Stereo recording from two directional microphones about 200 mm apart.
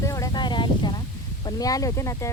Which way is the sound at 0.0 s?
15° left (ahead or behind).